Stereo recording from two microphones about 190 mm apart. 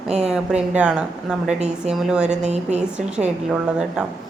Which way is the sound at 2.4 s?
35° right (ahead or behind).